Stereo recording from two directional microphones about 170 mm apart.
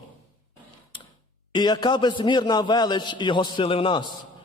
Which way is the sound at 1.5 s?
25° left (ahead or behind).